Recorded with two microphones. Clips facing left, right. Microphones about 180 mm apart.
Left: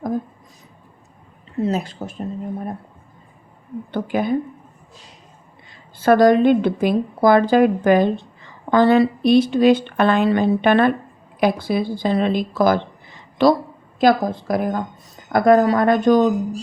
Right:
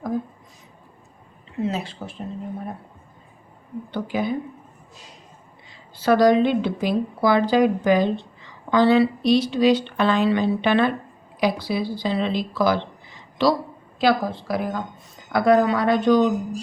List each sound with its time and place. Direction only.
1.6 s a woman's voice: 45° left (ahead or behind)
3.9 s a woman's voice: 50° left (ahead or behind)
6.0 s a woman's voice: 50° left (ahead or behind)